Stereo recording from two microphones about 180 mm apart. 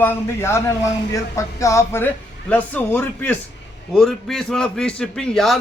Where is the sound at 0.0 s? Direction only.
15° left (ahead or behind).